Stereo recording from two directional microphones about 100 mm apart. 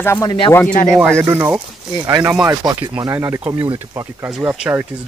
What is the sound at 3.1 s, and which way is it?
Speech, 25° right (ahead or behind).